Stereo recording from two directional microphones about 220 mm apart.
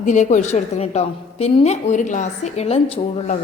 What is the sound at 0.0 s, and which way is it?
A woman's voice, 35° left (ahead or behind).